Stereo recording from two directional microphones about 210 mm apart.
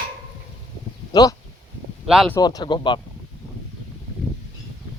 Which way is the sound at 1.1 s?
15° left (ahead or behind).